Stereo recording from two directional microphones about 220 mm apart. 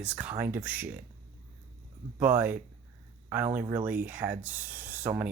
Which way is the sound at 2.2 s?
10° right (ahead or behind).